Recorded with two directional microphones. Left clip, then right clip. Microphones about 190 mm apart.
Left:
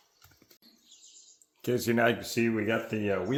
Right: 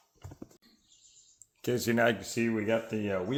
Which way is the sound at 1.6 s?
35° right (ahead or behind).